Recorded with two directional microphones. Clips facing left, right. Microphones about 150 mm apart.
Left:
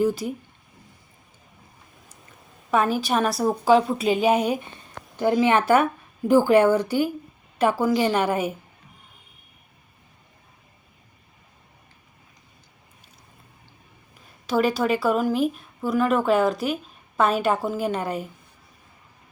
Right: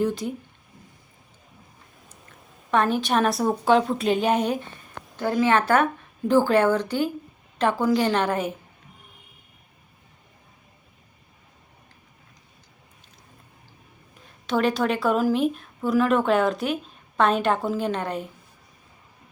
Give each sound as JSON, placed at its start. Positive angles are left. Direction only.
{"t": 0.0, "sound": "a woman's voice", "side_deg": 5}
{"t": 2.6, "sound": "a woman's voice", "side_deg": 5}
{"t": 14.4, "sound": "a woman's voice", "side_deg": 5}